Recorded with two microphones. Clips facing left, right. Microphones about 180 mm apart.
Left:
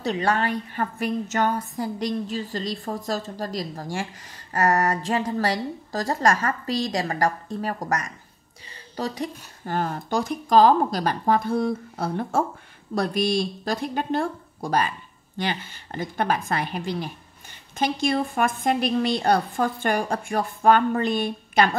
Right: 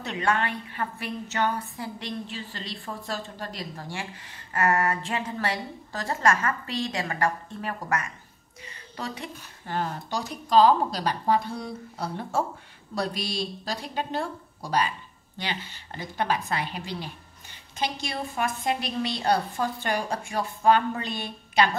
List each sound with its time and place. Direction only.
0.0 s a woman's voice: 35° left (ahead or behind); by 21.6 s 50° left (ahead or behind)